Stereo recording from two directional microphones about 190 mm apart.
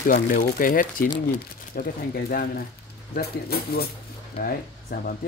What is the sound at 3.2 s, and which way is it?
Speech, 55° left (ahead or behind).